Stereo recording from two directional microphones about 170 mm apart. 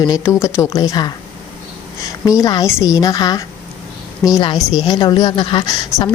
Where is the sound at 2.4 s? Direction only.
20° left (ahead or behind).